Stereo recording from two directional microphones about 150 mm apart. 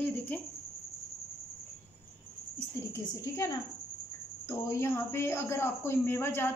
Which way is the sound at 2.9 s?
20° left (ahead or behind).